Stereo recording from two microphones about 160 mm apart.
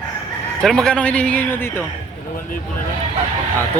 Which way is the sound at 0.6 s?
5° left (ahead or behind).